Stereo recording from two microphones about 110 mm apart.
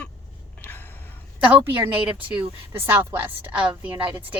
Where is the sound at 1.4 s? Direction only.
15° right (ahead or behind).